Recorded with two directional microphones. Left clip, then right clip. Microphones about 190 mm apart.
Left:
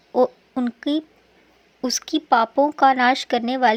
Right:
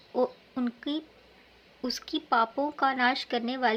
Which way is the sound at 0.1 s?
40° left (ahead or behind).